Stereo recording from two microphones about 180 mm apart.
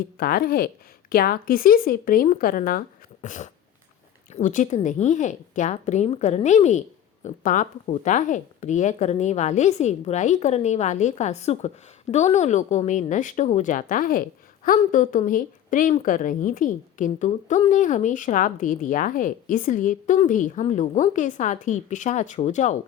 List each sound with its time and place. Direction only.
0.2 s a woman's voice: 55° left (ahead or behind)